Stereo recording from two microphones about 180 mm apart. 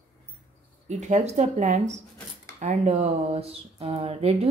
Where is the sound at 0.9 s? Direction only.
40° right (ahead or behind).